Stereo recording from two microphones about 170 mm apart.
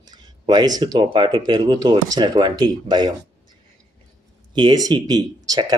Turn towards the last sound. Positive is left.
turn(degrees=-20)  # may be behind; listen again after turning